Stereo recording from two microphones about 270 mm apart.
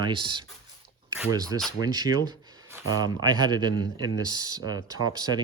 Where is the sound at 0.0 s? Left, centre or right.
Centre.